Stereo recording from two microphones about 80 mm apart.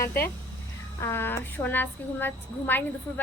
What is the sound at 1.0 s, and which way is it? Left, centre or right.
A woman's voice, left.